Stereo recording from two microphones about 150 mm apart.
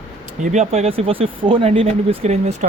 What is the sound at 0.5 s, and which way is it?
Speech, 45° right (ahead or behind).